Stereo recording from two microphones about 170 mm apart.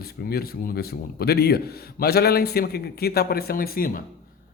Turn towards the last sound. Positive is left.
turn(degrees=60)  # may be behind; listen again after turning